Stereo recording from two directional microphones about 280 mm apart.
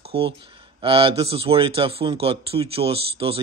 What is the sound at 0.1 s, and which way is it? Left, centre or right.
A man's voice, centre.